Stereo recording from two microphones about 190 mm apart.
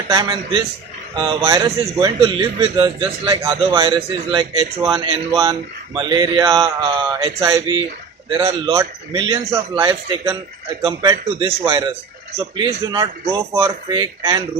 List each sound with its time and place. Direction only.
0.1 s a man's voice: 25° right (ahead or behind)